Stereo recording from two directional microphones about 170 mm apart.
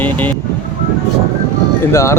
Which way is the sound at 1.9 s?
15° left (ahead or behind).